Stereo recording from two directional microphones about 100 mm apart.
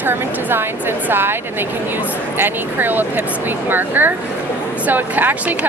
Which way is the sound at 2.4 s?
20° right (ahead or behind).